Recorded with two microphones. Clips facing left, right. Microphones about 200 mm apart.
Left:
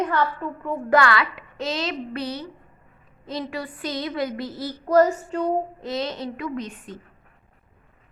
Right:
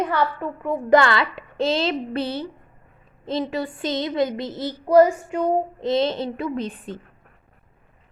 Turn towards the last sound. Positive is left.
turn(degrees=-30)  # may be behind; listen again after turning